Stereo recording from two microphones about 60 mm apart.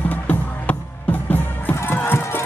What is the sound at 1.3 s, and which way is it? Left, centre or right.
Music, left.